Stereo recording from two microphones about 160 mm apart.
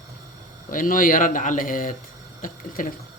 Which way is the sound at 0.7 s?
60° left (ahead or behind).